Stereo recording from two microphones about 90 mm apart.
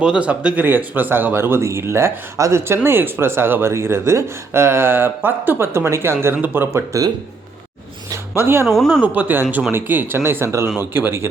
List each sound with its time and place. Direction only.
0.0 s speech: 10° right (ahead or behind)
8.1 s a sound: 25° right (ahead or behind)
8.6 s speech: centre (ahead or behind)
9.1 s speech: 20° right (ahead or behind)